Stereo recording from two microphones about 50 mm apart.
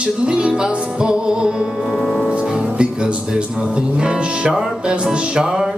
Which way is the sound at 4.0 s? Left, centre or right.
Centre.